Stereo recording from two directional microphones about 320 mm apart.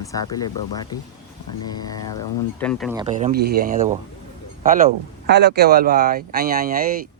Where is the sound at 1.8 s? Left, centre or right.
Centre.